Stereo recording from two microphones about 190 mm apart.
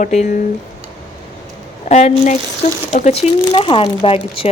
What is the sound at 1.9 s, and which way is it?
Speech, 35° left (ahead or behind).